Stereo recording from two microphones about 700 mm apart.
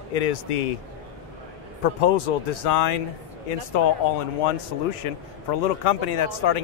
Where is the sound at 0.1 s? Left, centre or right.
Left.